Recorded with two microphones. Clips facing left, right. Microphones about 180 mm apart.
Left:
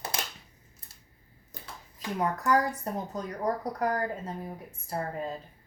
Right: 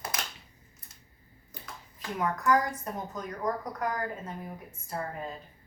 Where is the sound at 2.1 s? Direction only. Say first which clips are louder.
Even; 35° left (ahead or behind).